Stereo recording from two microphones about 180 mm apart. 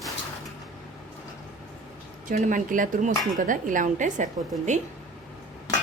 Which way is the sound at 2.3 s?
50° right (ahead or behind).